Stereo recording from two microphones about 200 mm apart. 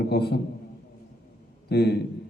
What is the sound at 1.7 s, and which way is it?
Speech, 55° left (ahead or behind).